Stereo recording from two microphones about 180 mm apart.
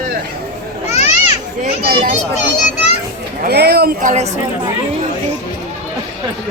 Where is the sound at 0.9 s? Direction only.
40° left (ahead or behind).